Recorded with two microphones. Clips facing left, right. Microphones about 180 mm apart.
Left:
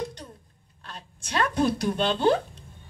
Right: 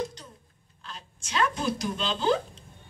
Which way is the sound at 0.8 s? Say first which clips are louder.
Left 3 dB; 60° left (ahead or behind).